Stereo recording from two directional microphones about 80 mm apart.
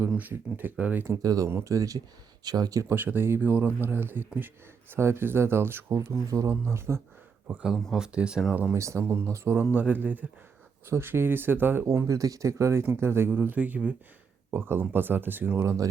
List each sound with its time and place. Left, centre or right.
0.2 s speech: right
1.2 s speech: right
1.5 s speech: right
2.4 s speech: right
2.9 s speech: right
6.2 s speech: right
7.4 s speech: centre
8.7 s speech: right
9.7 s speech: right
12.0 s speech: right; by 13.9 s centre
14.5 s speech: right
15.6 s speech: right